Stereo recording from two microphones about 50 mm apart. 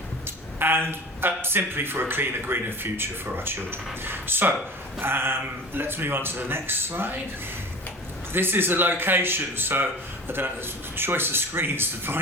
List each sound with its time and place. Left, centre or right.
0.6 s a man's voice: right
8.3 s a man's voice: right